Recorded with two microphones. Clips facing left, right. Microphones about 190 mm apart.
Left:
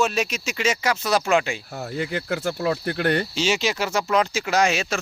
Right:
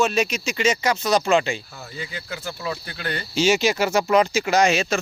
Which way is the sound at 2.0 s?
65° left (ahead or behind).